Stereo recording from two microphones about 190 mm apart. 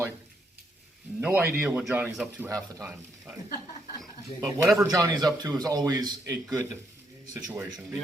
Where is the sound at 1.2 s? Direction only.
10° right (ahead or behind).